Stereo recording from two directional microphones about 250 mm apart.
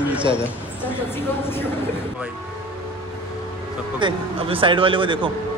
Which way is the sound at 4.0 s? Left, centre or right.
Right.